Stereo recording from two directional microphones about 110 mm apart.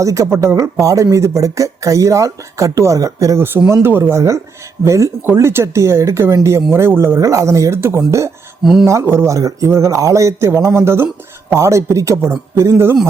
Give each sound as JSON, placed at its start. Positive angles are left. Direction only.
{"t": 0.0, "sound": "speech", "side_deg": -30}
{"t": 8.6, "sound": "speech", "side_deg": -5}
{"t": 8.9, "sound": "speech", "side_deg": -25}